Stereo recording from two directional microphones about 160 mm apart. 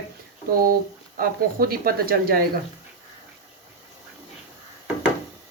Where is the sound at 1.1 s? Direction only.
70° right (ahead or behind).